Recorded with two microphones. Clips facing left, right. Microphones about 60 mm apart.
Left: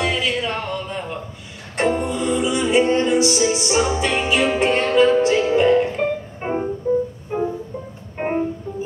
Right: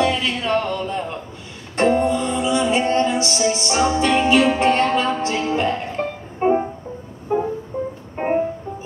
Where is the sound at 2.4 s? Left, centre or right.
Centre.